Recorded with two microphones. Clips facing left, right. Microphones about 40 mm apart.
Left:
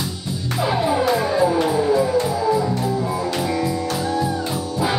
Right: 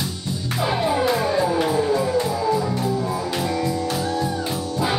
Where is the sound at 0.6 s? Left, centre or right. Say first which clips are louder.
Left 1 dB; centre.